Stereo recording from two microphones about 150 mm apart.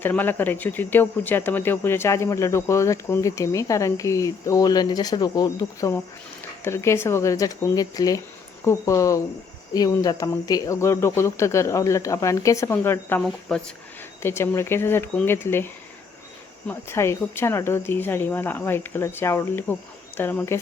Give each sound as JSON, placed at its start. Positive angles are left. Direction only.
{"t": 0.0, "sound": "speech", "side_deg": 15}
{"t": 13.5, "sound": "speech", "side_deg": 5}
{"t": 14.2, "sound": "speech", "side_deg": 15}